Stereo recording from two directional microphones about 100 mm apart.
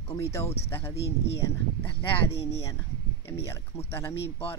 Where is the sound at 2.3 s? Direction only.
75° left (ahead or behind).